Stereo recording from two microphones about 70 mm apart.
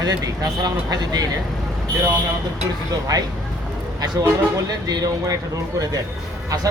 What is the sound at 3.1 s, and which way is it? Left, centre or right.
Speech, right.